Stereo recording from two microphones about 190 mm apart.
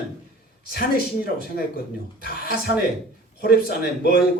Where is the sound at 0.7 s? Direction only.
55° left (ahead or behind).